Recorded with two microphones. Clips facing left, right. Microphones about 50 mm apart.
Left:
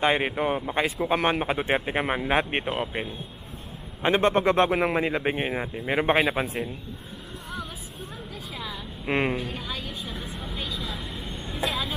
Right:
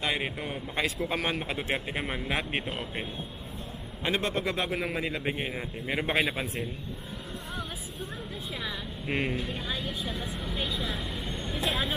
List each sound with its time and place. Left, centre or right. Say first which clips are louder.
0.0 s a man's voice: left 8 dB; left
4.0 s a man's voice: left 8 dB; left
4.6 s a man's voice: left 7 dB; left
6.4 s speech: left 4 dB; centre
9.0 s a man's voice: left 5 dB; left
9.4 s a woman's voice: left 1 dB; centre
10.8 s vehicle: right 1 dB; centre
11.5 s speech: left 2 dB; centre